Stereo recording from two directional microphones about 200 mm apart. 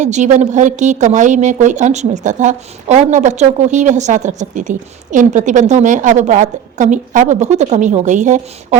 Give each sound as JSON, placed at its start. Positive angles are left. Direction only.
{"t": 0.0, "sound": "a woman's voice", "side_deg": -35}